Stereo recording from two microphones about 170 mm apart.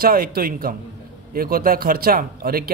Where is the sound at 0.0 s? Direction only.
60° right (ahead or behind).